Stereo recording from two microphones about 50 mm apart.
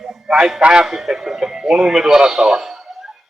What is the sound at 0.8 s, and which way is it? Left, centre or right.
Speech, centre.